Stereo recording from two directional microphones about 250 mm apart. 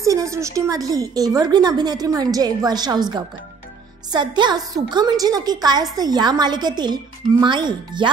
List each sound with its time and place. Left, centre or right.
0.0 s speech: centre